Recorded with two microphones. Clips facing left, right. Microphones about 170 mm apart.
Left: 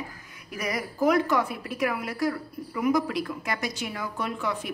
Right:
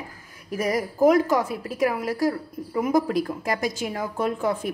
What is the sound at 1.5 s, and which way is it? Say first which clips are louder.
Speech: right 4 dB; 30° right (ahead or behind).